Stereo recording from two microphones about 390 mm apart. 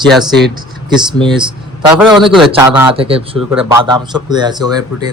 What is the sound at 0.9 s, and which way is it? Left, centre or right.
Speech, centre.